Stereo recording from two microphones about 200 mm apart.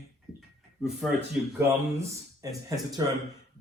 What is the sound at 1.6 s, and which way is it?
Speech, 15° right (ahead or behind).